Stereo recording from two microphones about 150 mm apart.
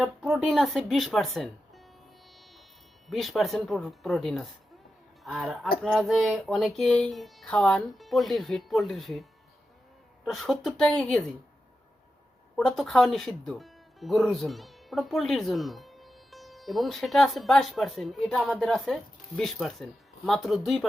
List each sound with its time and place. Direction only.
0.0 s speech: 5° right (ahead or behind)
3.1 s speech: centre (ahead or behind)
10.2 s speech: centre (ahead or behind)
12.5 s speech: centre (ahead or behind)